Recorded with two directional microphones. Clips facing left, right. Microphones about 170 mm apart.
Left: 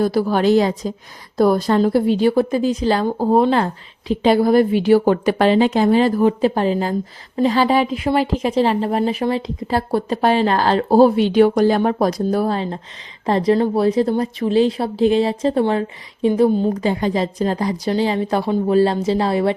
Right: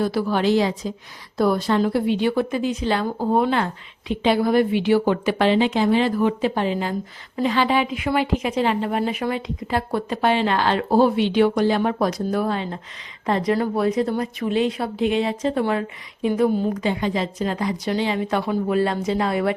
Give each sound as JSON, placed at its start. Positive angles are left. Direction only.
{"t": 0.0, "sound": "a woman's voice", "side_deg": 40}